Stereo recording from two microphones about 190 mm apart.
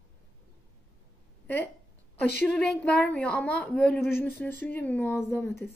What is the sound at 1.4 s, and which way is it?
A woman's voice, 10° left (ahead or behind).